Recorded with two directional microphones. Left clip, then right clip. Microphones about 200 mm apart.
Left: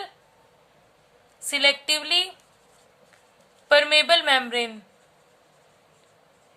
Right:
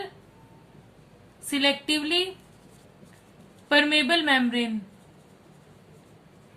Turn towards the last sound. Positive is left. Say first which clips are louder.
# left 2 dB
turn(degrees=45)  # may be behind; listen again after turning